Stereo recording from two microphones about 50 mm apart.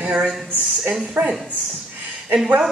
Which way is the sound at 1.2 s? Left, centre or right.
Right.